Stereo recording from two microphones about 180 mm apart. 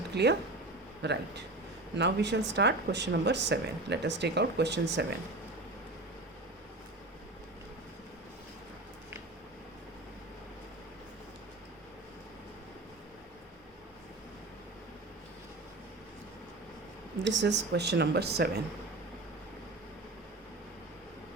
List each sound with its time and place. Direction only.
0.1 s speech: 65° right (ahead or behind)
17.4 s speech: 75° right (ahead or behind)